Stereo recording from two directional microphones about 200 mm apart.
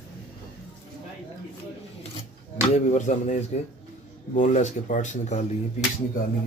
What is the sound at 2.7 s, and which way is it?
A man's voice, 35° left (ahead or behind).